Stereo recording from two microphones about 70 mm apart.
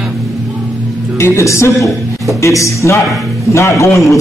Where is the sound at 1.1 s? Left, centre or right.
Left.